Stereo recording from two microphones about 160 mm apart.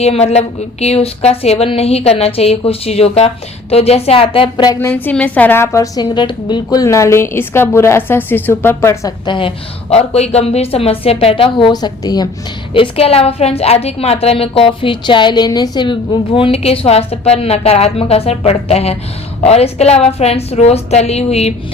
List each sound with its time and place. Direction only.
0.0 s a woman's voice: 40° left (ahead or behind)
9.9 s a woman's voice: 40° left (ahead or behind); by 12.3 s 25° left (ahead or behind)
12.7 s a woman's voice: 35° left (ahead or behind)